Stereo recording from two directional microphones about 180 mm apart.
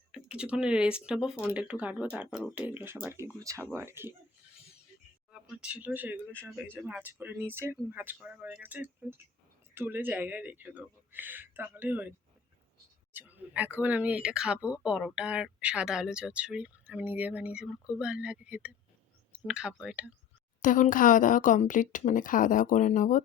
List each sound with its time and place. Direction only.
0.1 s speech: 5° right (ahead or behind)
5.3 s speech: 5° right (ahead or behind)
13.1 s speech: 10° right (ahead or behind)
20.6 s speech: 45° left (ahead or behind)